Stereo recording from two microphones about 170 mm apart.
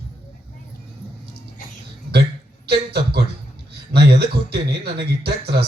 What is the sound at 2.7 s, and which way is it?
A man's voice, 70° right (ahead or behind).